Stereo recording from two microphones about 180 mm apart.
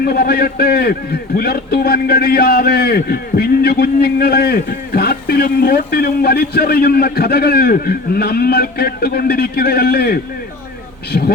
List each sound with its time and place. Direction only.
0.0 s a man's voice: 60° left (ahead or behind)